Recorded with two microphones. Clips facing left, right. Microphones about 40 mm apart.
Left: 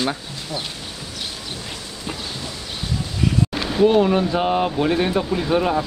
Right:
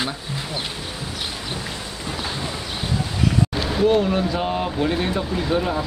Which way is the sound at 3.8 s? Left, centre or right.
Centre.